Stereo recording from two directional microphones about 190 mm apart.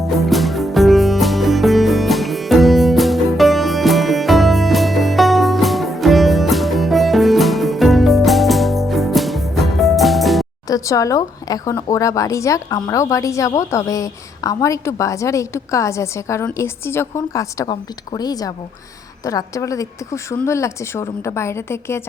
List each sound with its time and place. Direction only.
0.0 s music: centre (ahead or behind)
10.7 s speech: 15° left (ahead or behind)